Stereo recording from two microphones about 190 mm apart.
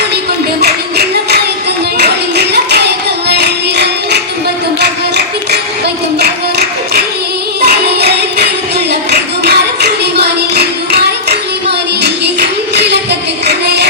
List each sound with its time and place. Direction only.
0.6 s a sound: 55° right (ahead or behind)
2.0 s hands: 60° right (ahead or behind)
4.8 s a sound: 60° right (ahead or behind)
7.6 s music: 60° right (ahead or behind)
8.9 s singing: 60° right (ahead or behind)
12.0 s music: 65° right (ahead or behind)